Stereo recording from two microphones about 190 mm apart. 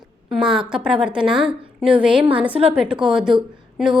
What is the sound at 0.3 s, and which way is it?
A woman's voice, 5° right (ahead or behind).